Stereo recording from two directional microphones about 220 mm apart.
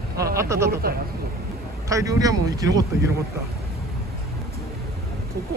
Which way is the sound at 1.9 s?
15° right (ahead or behind).